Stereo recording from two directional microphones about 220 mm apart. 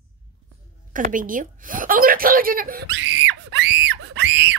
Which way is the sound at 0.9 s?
40° right (ahead or behind).